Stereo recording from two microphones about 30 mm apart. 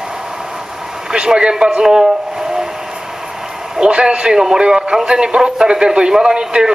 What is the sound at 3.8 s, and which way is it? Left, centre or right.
A man's voice, right.